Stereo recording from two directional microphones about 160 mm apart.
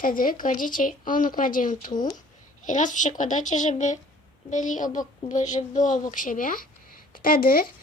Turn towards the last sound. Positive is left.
turn(degrees=65)  # may be behind; listen again after turning